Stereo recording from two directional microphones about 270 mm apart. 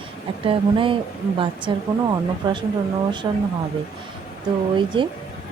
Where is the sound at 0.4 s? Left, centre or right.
Centre.